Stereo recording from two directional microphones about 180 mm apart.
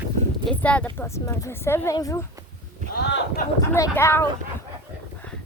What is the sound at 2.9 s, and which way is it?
Speech, 80° left.